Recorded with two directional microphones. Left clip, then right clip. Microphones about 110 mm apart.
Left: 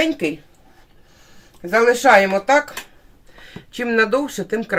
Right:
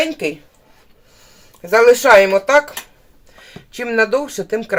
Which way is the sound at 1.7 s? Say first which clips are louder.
Right 4 dB; 75° right (ahead or behind).